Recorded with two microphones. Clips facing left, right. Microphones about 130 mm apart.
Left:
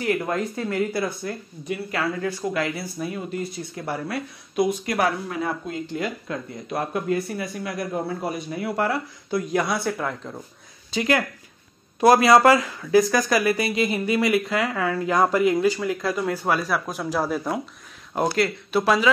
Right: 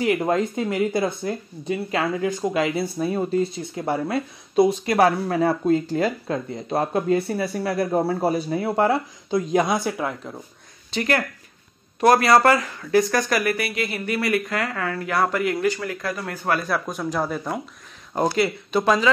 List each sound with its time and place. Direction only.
0.0 s speech: 20° right (ahead or behind); by 10.4 s 5° right (ahead or behind)
11.0 s speech: 15° left (ahead or behind)
16.6 s speech: 5° left (ahead or behind)